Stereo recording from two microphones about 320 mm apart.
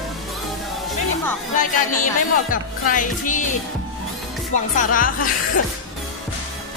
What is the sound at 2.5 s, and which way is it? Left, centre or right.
A woman's voice, left.